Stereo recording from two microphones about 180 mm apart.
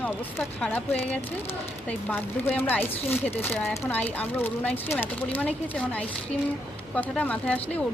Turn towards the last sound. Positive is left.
turn(degrees=5)  # may be behind; listen again after turning